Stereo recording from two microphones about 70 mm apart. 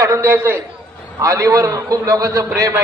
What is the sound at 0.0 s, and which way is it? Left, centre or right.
A man's voice, right.